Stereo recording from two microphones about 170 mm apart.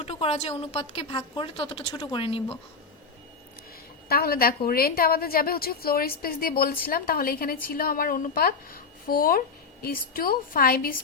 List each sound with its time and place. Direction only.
0.0 s a woman's voice: 35° left (ahead or behind)
4.1 s a woman's voice: 60° left (ahead or behind)